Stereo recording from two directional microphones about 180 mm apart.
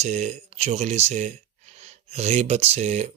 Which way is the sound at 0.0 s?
40° right (ahead or behind).